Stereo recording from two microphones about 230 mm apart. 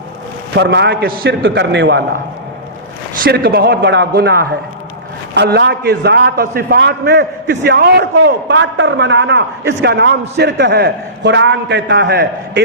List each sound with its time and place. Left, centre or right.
0.5 s a man's voice: right
3.2 s a man's voice: right